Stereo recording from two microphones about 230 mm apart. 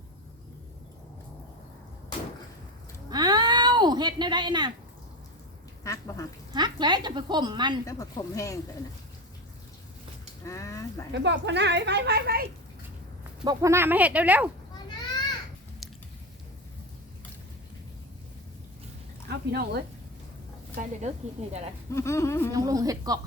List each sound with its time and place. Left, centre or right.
3.1 s a sound: centre
5.8 s speech: centre
6.5 s speech: centre
7.9 s speech: centre
10.4 s speech: centre
11.1 s a woman's voice: right
13.4 s speech: centre
15.8 s chewing: centre
19.3 s a woman's voice: right
21.4 s speech: right
21.9 s speech: centre
22.5 s speech: centre